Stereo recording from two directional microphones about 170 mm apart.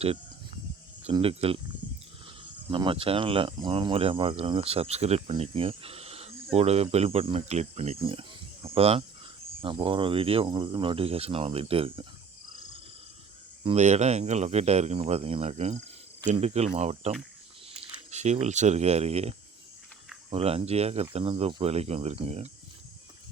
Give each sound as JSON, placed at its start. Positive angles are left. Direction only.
{"t": 1.1, "sound": "speech", "side_deg": -35}
{"t": 2.6, "sound": "speech", "side_deg": -30}
{"t": 13.7, "sound": "speech", "side_deg": -40}